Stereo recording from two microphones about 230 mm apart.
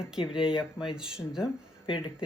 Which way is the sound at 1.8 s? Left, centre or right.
Left.